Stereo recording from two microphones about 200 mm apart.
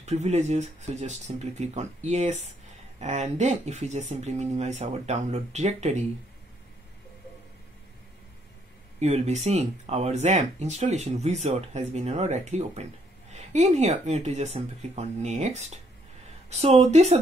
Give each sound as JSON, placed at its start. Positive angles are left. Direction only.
{"t": 0.0, "sound": "speech", "side_deg": -35}
{"t": 9.0, "sound": "speech", "side_deg": -35}